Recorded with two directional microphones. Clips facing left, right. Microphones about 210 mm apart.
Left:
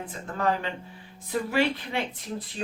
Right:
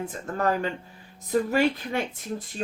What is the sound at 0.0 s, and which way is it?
Speech, 45° right (ahead or behind).